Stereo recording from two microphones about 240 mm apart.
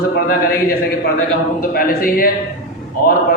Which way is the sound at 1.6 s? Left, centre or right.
Left.